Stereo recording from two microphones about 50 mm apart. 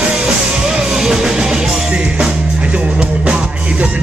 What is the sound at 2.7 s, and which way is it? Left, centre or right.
Music, right.